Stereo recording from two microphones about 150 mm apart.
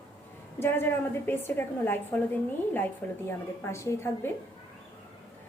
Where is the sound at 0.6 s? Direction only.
15° left (ahead or behind).